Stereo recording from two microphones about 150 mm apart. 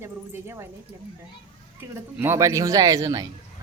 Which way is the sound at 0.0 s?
15° right (ahead or behind).